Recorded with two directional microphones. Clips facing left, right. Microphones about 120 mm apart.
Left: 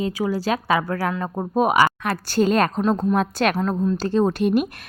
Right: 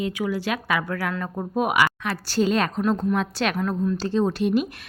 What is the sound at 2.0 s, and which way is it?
A woman's voice, 50° left (ahead or behind).